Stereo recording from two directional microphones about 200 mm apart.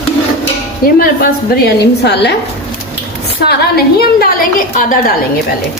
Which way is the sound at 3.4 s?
55° left (ahead or behind).